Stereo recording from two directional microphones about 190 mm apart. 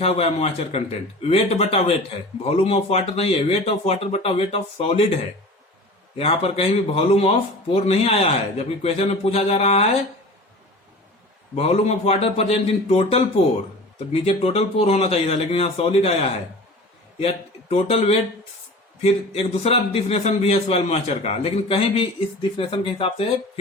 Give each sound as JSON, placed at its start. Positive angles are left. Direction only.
{"t": 0.0, "sound": "a man's voice", "side_deg": 30}
{"t": 11.5, "sound": "a man's voice", "side_deg": 35}